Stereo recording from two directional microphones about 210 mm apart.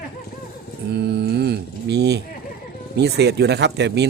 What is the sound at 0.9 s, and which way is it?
Mantra, 50° right (ahead or behind).